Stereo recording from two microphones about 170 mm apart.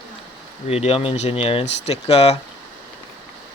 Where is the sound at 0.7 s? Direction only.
35° left (ahead or behind).